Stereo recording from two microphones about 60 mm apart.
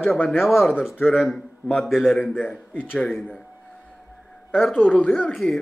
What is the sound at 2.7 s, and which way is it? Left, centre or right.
Speech, left.